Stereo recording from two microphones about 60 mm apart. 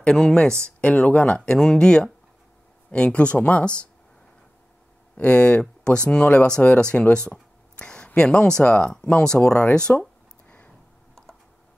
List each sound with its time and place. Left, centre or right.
0.0 s speech: centre
5.1 s speech: left
7.7 s a sound: centre
8.1 s speech: centre